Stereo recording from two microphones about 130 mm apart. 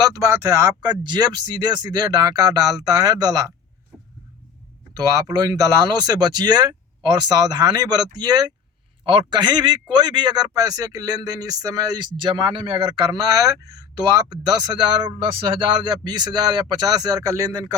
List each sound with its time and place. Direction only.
0.0 s a man's voice: 25° right (ahead or behind)
3.9 s a sound: 10° right (ahead or behind)
4.9 s a man's voice: 25° right (ahead or behind)